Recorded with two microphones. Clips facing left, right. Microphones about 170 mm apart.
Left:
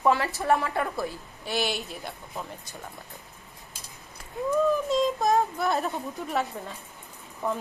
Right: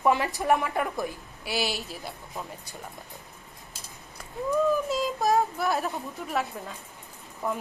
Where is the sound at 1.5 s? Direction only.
5° right (ahead or behind).